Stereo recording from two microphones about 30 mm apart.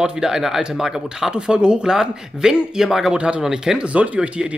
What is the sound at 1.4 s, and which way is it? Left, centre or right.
Speech, right.